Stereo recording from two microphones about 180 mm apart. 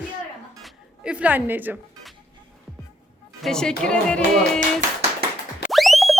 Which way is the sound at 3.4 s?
5° left (ahead or behind).